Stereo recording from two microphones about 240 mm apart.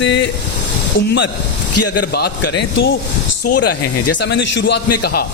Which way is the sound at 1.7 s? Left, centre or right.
Left.